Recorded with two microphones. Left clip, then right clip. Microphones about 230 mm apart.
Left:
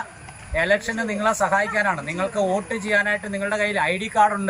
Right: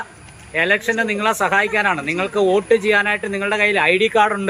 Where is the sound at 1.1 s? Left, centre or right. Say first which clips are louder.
Right 1 dB; right.